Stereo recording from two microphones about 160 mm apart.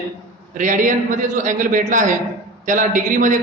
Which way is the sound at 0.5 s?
55° right (ahead or behind).